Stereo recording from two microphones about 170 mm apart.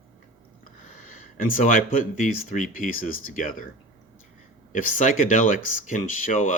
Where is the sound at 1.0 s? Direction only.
55° left (ahead or behind).